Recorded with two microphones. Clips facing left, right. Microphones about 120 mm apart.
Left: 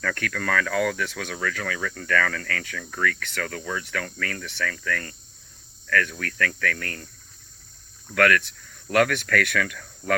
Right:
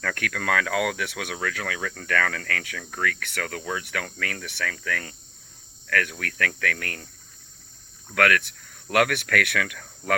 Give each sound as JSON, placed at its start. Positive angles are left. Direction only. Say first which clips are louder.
{"t": 0.0, "sound": "speech", "louder": "even", "side_deg": -55}
{"t": 8.1, "sound": "speech", "louder": "left 1 dB", "side_deg": -55}